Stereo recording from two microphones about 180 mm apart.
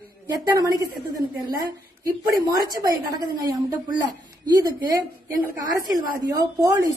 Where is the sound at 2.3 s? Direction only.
20° right (ahead or behind).